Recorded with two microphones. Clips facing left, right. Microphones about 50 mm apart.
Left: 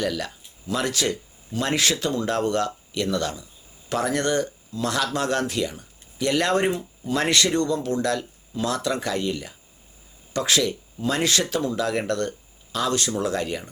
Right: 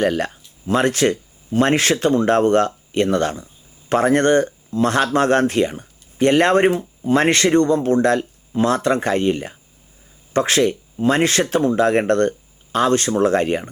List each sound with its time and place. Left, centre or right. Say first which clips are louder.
0.0 s speech: right 8 dB; right